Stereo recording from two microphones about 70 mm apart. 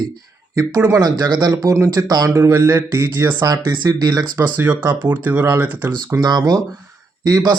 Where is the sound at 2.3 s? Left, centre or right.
Right.